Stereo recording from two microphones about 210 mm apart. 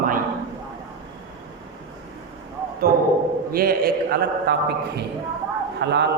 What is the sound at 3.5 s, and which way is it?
A man's voice, 45° right (ahead or behind).